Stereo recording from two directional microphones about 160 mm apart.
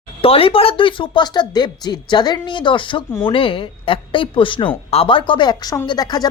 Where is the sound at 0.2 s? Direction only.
35° left (ahead or behind).